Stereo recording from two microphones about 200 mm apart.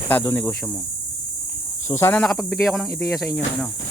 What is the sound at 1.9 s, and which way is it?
Speech, 15° left (ahead or behind).